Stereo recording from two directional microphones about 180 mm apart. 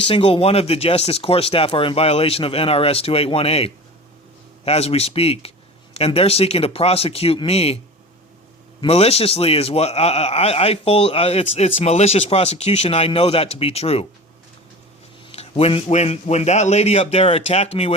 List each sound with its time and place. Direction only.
0.0 s a man's voice: 30° left (ahead or behind)
8.8 s a man's voice: 35° left (ahead or behind)
15.3 s a man's voice: 35° left (ahead or behind)